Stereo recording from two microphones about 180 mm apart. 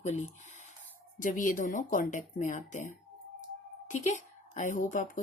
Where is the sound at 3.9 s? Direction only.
40° left (ahead or behind).